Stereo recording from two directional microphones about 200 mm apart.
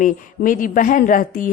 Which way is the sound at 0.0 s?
40° left (ahead or behind).